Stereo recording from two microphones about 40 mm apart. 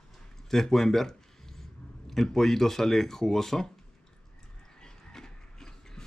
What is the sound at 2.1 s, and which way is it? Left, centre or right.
Speech, centre.